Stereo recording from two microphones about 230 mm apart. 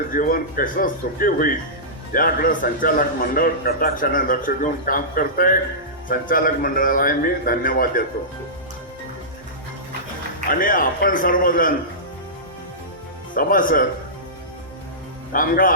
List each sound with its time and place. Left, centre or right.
0.1 s a man's voice: left
10.5 s a man's voice: left
13.3 s a man's voice: left
15.3 s a man's voice: left